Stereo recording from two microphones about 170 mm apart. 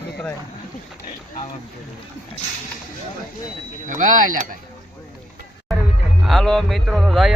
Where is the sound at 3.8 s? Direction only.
50° right (ahead or behind).